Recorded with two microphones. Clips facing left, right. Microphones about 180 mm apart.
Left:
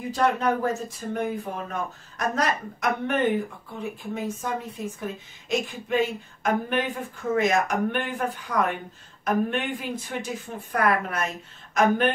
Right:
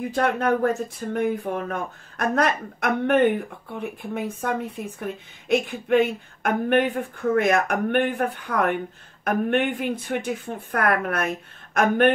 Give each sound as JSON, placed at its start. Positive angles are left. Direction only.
{"t": 0.1, "sound": "speech", "side_deg": -55}